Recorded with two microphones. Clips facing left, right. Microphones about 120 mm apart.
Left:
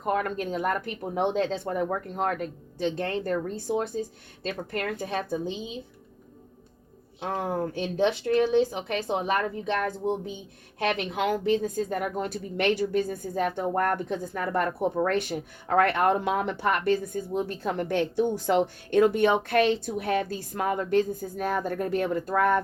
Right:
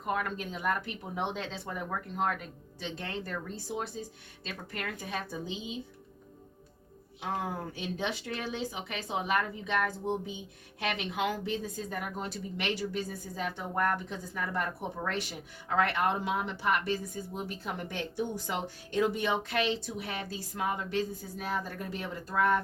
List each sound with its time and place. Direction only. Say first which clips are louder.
0.0 s speech: left 6 dB; 45° left (ahead or behind)
7.5 s speech: left 8 dB; 50° left (ahead or behind)
10.8 s a woman's voice: left 6 dB; 50° left (ahead or behind)